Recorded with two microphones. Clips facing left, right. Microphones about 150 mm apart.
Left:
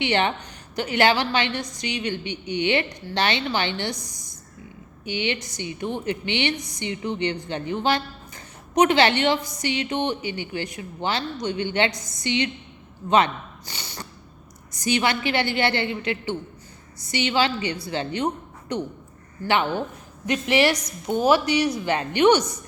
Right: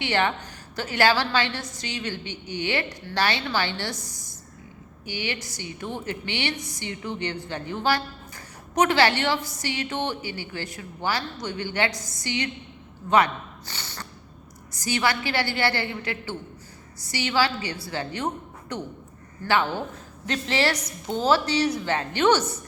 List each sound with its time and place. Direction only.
0.0 s a woman's voice: 20° left (ahead or behind)